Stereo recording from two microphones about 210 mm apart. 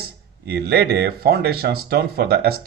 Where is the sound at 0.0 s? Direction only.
50° right (ahead or behind).